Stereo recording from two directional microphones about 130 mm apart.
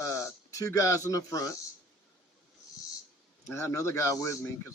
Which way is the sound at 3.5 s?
20° left (ahead or behind).